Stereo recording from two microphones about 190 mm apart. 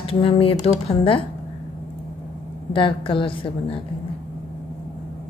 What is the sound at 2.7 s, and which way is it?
Speech, 25° left (ahead or behind).